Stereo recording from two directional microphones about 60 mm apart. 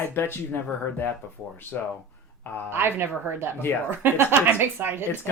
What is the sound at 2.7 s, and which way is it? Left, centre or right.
Speech, right.